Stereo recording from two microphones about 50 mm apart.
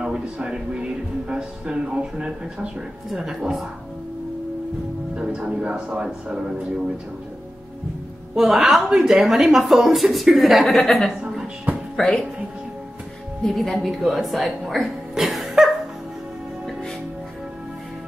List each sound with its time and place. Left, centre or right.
0.0 s speech: centre
5.1 s speech: centre
8.4 s a woman's voice: centre
11.7 s music: centre
13.5 s a woman's voice: centre